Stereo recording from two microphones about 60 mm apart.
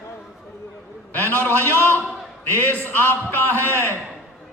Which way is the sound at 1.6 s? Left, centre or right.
Left.